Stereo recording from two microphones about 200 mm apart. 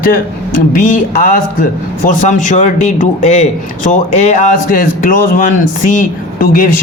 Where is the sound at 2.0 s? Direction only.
40° left (ahead or behind).